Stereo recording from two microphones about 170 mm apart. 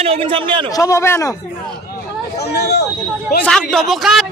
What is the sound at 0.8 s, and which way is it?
Speech, 15° left (ahead or behind).